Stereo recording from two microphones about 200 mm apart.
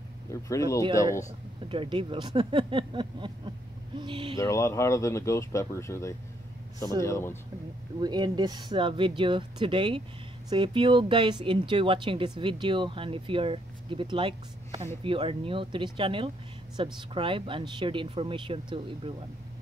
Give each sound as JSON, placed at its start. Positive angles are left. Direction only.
{"t": 0.3, "sound": "speech", "side_deg": 15}
{"t": 1.7, "sound": "speech", "side_deg": -25}
{"t": 4.4, "sound": "speech", "side_deg": 15}
{"t": 8.0, "sound": "speech", "side_deg": -20}